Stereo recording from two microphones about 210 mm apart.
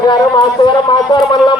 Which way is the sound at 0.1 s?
20° left (ahead or behind).